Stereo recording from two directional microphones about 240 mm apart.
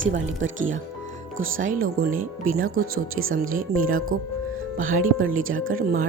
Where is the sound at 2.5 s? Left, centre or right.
Right.